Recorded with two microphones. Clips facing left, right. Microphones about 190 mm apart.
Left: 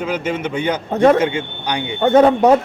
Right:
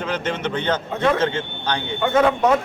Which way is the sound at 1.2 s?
15° left (ahead or behind).